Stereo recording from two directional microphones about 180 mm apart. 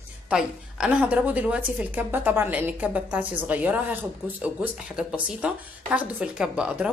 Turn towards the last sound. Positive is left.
turn(degrees=-5)  # may be behind; listen again after turning